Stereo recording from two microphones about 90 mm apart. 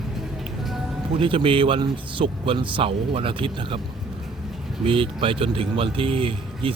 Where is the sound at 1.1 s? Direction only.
80° right.